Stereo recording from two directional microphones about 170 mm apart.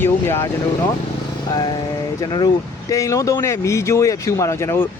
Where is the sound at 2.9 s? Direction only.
20° left (ahead or behind).